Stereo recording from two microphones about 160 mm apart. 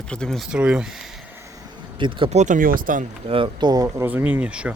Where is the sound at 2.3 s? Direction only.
50° right (ahead or behind).